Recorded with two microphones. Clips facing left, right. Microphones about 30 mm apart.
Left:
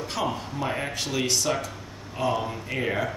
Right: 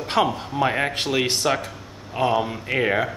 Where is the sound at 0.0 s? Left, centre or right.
Right.